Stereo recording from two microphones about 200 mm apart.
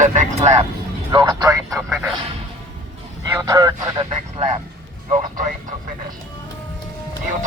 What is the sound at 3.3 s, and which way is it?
Speech, 15° right (ahead or behind).